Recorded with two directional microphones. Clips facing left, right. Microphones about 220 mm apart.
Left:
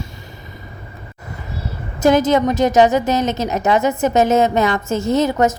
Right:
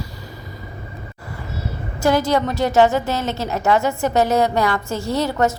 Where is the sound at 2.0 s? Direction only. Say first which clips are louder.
Left 4 dB; 20° left (ahead or behind).